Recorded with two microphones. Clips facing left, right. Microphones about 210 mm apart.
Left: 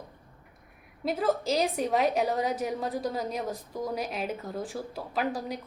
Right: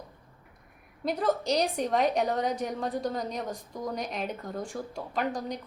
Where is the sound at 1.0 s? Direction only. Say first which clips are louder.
Even; centre (ahead or behind).